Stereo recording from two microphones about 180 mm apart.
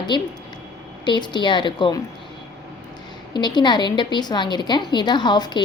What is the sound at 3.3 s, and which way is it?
A woman's voice, 25° left (ahead or behind).